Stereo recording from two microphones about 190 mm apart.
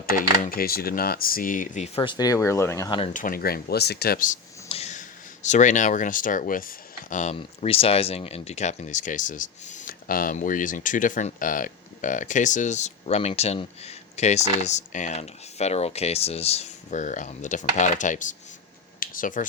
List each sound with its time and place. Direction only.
0.0 s speech: 45° left (ahead or behind)
2.0 s speech: 25° left (ahead or behind)
3.1 s speech: 45° left (ahead or behind)
4.7 s speech: 35° left (ahead or behind)
7.3 s speech: 30° left (ahead or behind)
18.9 s computer keyboard: 45° left (ahead or behind)